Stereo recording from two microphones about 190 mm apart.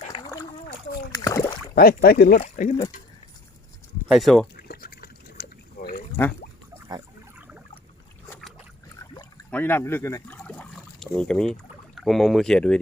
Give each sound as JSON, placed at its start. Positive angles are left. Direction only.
{"t": 0.1, "sound": "a sound", "side_deg": 25}
{"t": 1.1, "sound": "rowboat", "side_deg": 15}
{"t": 1.7, "sound": "speech", "side_deg": 50}
{"t": 2.4, "sound": "speech", "side_deg": 40}
{"t": 4.1, "sound": "speech", "side_deg": 0}
{"t": 4.5, "sound": "liquid", "side_deg": 55}
{"t": 7.3, "sound": "a sound", "side_deg": -10}
{"t": 8.3, "sound": "boat", "side_deg": 0}
{"t": 9.5, "sound": "speech", "side_deg": 10}